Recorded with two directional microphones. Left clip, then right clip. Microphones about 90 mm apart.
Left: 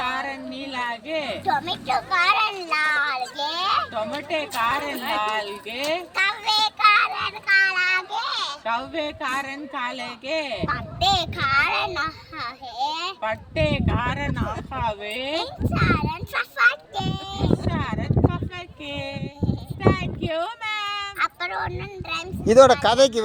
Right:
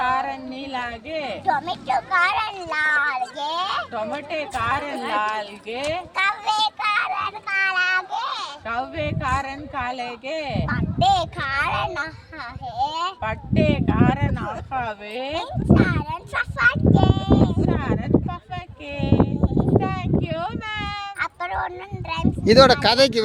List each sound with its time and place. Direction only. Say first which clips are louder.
0.0 s a sound: right 4 dB; 45° right (ahead or behind)
1.5 s a sound: right 2 dB; 15° right (ahead or behind)
4.3 s speech: left 1 dB; 45° right (ahead or behind)
6.1 s child singing: right 1 dB; 15° right (ahead or behind)
8.6 s speech: even; 55° right (ahead or behind)
10.7 s speech: right 3 dB; 20° right (ahead or behind)
13.2 s speech: even; 45° right (ahead or behind)
15.4 s a child's voice: right 8 dB; 15° right (ahead or behind)
17.6 s a sound: right 4 dB; 45° right (ahead or behind)
18.9 s speech: right 11 dB; 50° right (ahead or behind)
22.1 s speech: right 1 dB; 15° right (ahead or behind)
22.4 s speech: even; 45° right (ahead or behind)